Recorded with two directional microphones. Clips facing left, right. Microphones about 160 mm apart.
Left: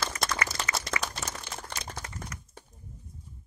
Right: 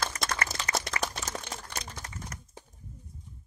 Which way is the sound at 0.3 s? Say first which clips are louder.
Even; 45° right (ahead or behind).